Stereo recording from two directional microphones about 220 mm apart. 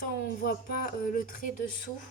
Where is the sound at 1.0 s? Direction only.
40° left (ahead or behind).